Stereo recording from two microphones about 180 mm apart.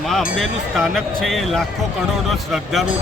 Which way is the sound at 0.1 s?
Centre (ahead or behind).